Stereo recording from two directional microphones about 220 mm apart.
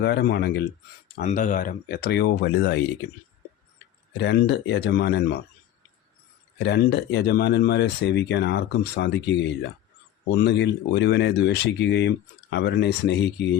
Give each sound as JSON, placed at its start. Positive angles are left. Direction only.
{"t": 0.0, "sound": "speech", "side_deg": 45}
{"t": 4.2, "sound": "speech", "side_deg": 50}
{"t": 6.6, "sound": "speech", "side_deg": 50}